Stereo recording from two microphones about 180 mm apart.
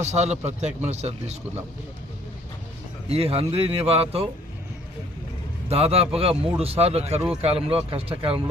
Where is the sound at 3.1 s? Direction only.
35° right (ahead or behind).